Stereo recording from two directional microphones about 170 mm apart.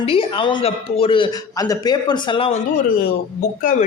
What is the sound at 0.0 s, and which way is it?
A man's voice, 30° left (ahead or behind).